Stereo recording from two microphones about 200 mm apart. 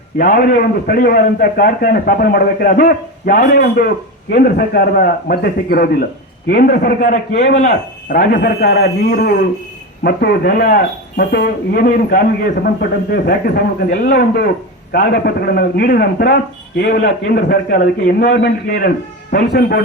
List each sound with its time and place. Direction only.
0.2 s a man's voice: 45° left (ahead or behind)
18.3 s a man's voice: 60° left (ahead or behind)